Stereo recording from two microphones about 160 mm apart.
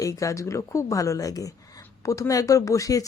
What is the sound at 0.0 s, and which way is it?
Speech, 20° left (ahead or behind).